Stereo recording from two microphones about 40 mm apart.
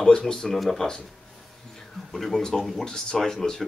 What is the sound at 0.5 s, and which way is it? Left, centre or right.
Speech, centre.